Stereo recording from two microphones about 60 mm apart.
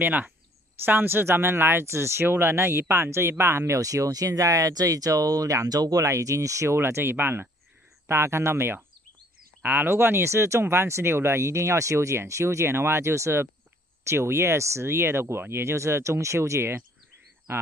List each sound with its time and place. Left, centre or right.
0.0 s speech: right
4.3 s speech: right
6.8 s speech: right